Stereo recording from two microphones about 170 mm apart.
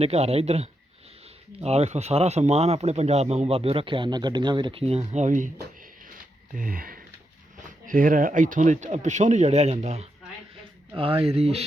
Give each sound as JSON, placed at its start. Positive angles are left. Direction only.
{"t": 0.0, "sound": "speech", "side_deg": -35}
{"t": 5.5, "sound": "a sound", "side_deg": -55}
{"t": 7.9, "sound": "speech", "side_deg": -55}